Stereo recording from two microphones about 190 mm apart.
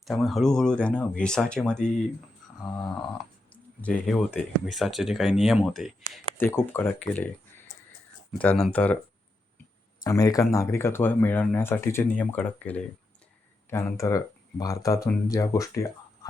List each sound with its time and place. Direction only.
0.0 s speech: centre (ahead or behind)
6.3 s speech: 10° left (ahead or behind)
8.3 s speech: 5° left (ahead or behind)
10.0 s speech: 20° left (ahead or behind)